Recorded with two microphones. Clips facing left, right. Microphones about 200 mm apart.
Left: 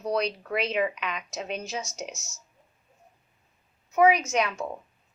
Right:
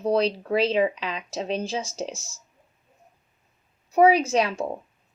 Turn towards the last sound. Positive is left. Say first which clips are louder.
# right 4 dB
turn(degrees=-30)  # may be behind; listen again after turning